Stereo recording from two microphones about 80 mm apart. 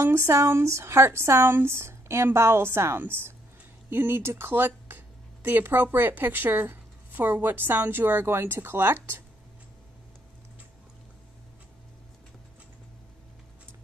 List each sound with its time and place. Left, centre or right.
0.0 s speech: right